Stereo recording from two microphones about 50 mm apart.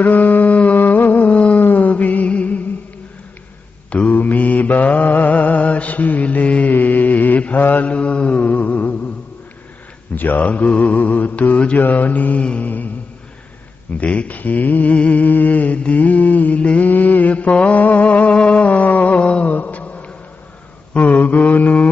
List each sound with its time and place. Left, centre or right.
0.0 s a sound: left
1.6 s music: left
4.1 s mantra: left
10.1 s mantra: left
12.4 s a sound: left
13.9 s mantra: left